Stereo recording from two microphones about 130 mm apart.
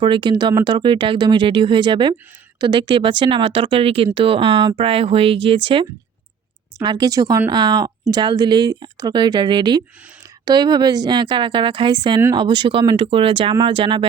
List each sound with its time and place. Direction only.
0.0 s speech: 40° right (ahead or behind)
6.7 s speech: 30° right (ahead or behind)